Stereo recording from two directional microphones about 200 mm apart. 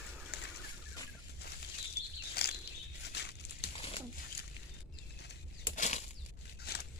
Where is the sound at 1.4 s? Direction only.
55° left (ahead or behind).